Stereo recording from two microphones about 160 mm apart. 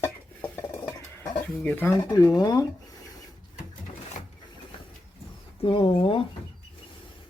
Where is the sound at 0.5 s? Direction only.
10° left (ahead or behind).